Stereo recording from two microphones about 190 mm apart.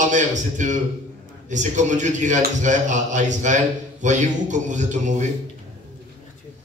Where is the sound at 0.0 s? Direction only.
40° right (ahead or behind).